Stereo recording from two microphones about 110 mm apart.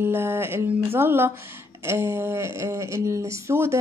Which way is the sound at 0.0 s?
20° right (ahead or behind).